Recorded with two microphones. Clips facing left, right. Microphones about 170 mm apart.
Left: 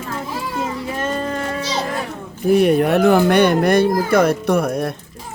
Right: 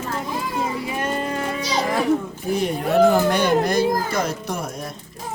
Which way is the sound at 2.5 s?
65° left (ahead or behind).